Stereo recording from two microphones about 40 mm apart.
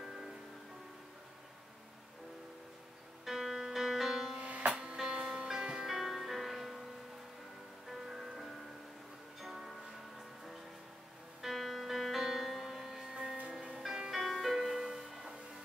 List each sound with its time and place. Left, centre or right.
0.0 s music: centre
3.3 s music: centre
4.4 s music: right
5.1 s music: right; by 6.8 s centre
7.9 s music: centre
9.4 s music: centre
11.4 s music: centre
14.2 s music: centre